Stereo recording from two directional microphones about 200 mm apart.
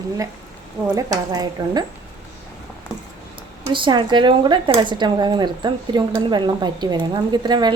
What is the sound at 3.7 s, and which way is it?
Speech, 25° right (ahead or behind).